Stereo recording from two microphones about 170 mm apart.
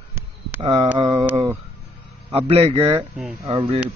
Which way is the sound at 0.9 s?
25° right (ahead or behind).